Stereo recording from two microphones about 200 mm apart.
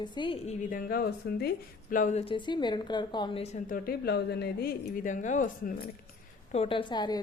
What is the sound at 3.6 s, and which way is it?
Speech, 45° left (ahead or behind).